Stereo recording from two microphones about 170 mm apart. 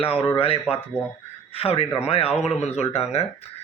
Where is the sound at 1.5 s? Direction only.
35° left (ahead or behind).